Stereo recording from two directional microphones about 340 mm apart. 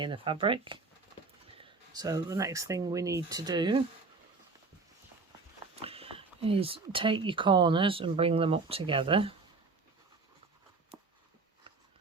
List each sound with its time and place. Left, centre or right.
0.0 s speech: centre
5.7 s speech: centre